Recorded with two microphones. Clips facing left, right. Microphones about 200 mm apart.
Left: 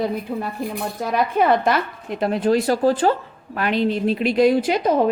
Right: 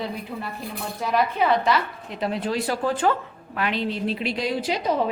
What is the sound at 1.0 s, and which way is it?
A woman's voice, 50° left (ahead or behind).